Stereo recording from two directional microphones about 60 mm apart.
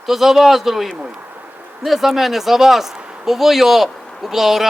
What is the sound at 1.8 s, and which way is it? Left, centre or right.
Speech, centre.